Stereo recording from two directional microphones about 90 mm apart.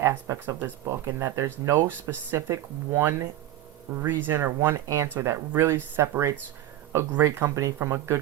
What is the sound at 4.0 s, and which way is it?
Speech, 25° right (ahead or behind).